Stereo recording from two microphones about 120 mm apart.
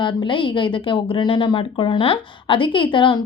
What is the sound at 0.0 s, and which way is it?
A woman's voice, 40° left (ahead or behind).